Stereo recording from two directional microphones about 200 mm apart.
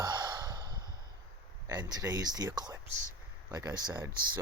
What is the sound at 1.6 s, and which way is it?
Speech, 15° right (ahead or behind).